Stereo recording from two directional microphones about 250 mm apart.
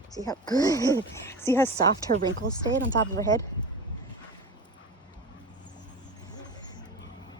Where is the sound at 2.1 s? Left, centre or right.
Right.